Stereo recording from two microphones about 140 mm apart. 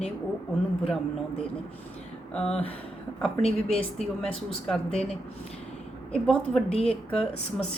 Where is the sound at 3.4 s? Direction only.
45° left (ahead or behind).